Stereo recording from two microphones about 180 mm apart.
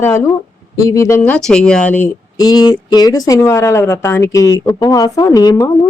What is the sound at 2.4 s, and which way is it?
A woman's voice, 25° left (ahead or behind).